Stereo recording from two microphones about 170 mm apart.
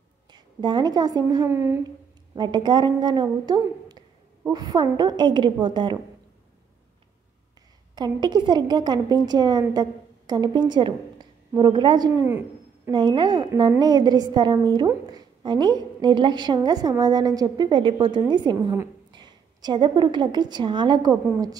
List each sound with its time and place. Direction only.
0.3 s a woman's voice: 25° right (ahead or behind)
2.3 s a woman's voice: 25° right (ahead or behind)
7.9 s a woman's voice: 25° right (ahead or behind)
12.3 s owl: 15° right (ahead or behind)
12.9 s a woman's voice: 25° right (ahead or behind)